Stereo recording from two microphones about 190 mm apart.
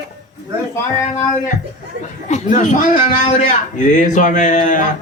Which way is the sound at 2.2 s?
40° left (ahead or behind).